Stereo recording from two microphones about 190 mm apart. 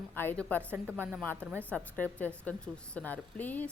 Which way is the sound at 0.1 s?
10° left (ahead or behind).